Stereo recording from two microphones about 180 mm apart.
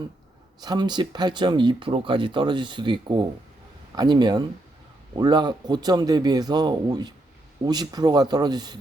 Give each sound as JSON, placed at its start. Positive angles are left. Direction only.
{"t": 0.6, "sound": "speech", "side_deg": -25}